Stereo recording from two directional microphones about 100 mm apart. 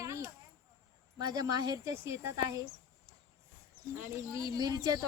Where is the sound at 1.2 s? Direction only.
40° right (ahead or behind).